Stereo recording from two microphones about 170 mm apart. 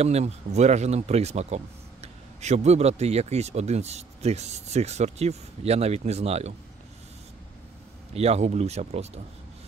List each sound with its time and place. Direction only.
0.0 s speech: 40° right (ahead or behind)
8.1 s speech: 40° right (ahead or behind)